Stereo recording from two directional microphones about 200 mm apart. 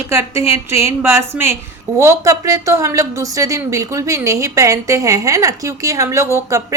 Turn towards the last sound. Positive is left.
turn(degrees=-15)  # may be behind; listen again after turning